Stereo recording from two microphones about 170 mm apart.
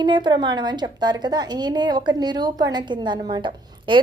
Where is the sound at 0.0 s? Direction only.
25° right (ahead or behind).